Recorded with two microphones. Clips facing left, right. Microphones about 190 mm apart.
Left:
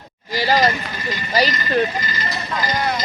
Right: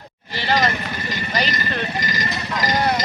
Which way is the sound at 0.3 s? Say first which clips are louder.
Left 3 dB; 40° left (ahead or behind).